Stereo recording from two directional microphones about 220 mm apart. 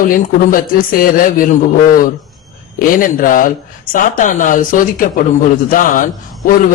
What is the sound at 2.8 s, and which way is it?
A man's voice, 40° left (ahead or behind).